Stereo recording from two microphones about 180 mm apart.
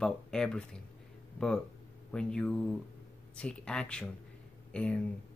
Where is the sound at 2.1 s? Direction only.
5° left (ahead or behind).